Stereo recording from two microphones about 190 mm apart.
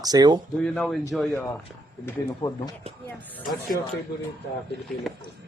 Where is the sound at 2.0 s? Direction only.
20° left (ahead or behind).